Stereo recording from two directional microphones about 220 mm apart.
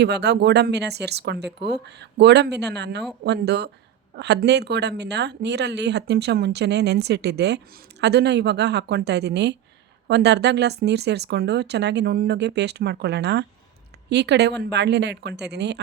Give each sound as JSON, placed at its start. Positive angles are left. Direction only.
{"t": 0.0, "sound": "a woman's voice", "side_deg": -50}